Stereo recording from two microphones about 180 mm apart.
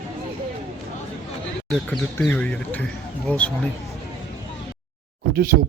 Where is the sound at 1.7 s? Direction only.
5° left (ahead or behind).